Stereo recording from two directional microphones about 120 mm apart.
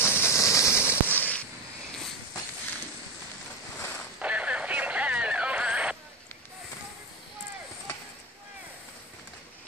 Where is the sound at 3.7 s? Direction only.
15° left (ahead or behind).